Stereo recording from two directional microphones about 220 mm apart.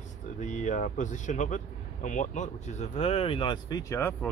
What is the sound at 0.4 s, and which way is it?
Speech, 35° left (ahead or behind).